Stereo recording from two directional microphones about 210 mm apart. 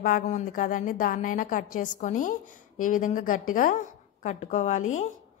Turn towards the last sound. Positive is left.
turn(degrees=35)  # may be behind; listen again after turning